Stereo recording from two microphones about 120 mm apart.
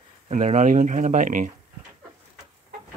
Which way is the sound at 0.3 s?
75° right (ahead or behind).